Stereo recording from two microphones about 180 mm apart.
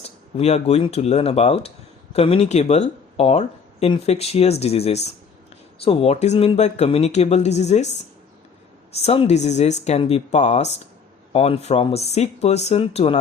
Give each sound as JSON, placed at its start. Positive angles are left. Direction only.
{"t": 0.3, "sound": "speech", "side_deg": 35}
{"t": 9.0, "sound": "speech", "side_deg": 35}